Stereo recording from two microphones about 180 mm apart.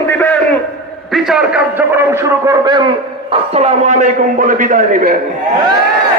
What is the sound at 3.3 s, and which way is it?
Speech, 35° right (ahead or behind).